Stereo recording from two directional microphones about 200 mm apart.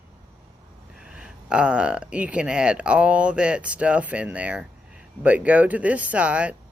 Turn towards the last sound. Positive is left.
turn(degrees=-5)  # may be behind; listen again after turning